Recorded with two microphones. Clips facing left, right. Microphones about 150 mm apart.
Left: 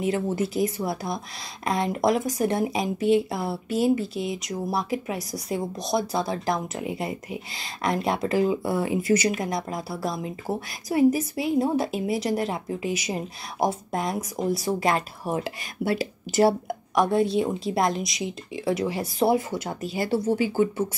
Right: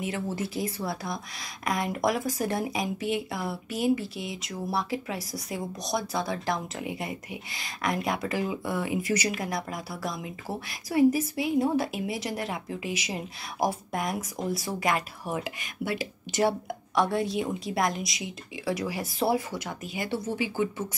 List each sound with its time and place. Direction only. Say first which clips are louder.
0.4 s speech: left 6 dB; 25° left (ahead or behind)
16.9 s speech: left 5 dB; 20° left (ahead or behind); by 20.8 s 40° left (ahead or behind)